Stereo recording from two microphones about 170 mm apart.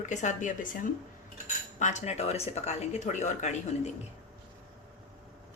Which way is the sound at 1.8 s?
45° left (ahead or behind).